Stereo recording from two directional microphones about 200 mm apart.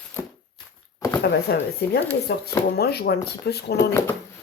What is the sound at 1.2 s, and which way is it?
Speech, 55° left (ahead or behind).